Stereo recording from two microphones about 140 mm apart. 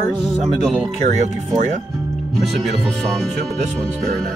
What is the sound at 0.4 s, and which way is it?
Music, centre (ahead or behind).